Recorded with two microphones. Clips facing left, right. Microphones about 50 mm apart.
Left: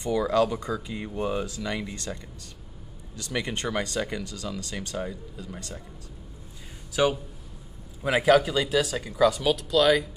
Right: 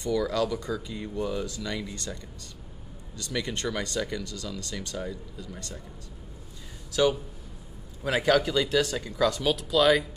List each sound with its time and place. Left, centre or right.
0.0 s speech: left
3.2 s speech: centre
6.9 s speech: left; by 10.0 s centre